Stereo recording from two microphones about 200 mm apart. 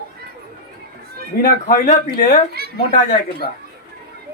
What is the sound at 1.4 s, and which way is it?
Speech, 40° left (ahead or behind).